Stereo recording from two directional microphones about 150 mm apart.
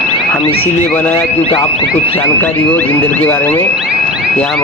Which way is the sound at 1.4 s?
40° left (ahead or behind).